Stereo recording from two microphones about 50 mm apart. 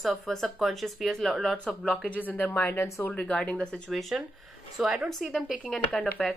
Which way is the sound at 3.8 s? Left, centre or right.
Centre.